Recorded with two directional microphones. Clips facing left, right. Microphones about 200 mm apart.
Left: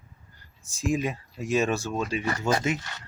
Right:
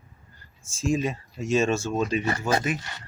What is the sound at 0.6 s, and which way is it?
Speech, 15° left (ahead or behind).